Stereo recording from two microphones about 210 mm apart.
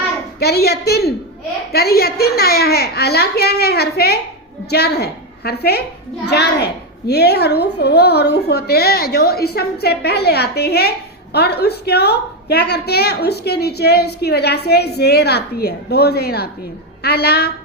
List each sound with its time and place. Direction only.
0.3 s a woman's voice: 50° left (ahead or behind)